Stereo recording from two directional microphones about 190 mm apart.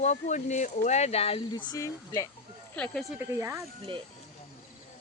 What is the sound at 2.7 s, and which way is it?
Speech, 5° left (ahead or behind).